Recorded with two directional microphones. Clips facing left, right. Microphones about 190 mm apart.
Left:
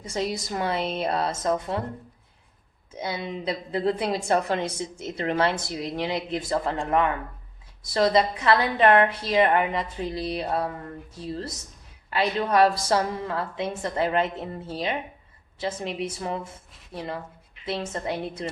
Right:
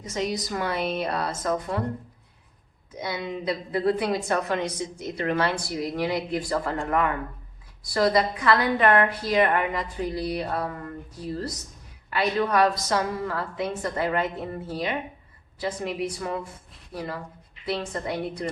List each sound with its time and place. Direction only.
0.0 s a woman's voice: 30° left (ahead or behind)
2.9 s a woman's voice: 25° left (ahead or behind)